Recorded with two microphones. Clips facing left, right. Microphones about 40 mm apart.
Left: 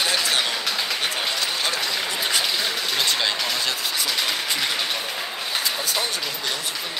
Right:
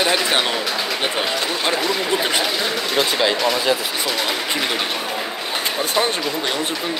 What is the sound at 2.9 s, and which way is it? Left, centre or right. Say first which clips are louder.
Speech: right 6 dB; centre.